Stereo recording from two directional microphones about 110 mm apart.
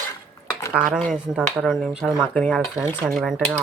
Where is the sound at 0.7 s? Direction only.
Centre (ahead or behind); by 3.2 s 15° left (ahead or behind).